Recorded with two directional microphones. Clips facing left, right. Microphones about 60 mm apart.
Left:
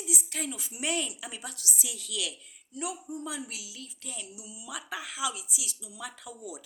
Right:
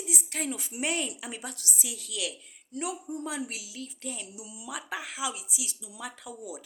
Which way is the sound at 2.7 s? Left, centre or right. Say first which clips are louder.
Right 2 dB; right.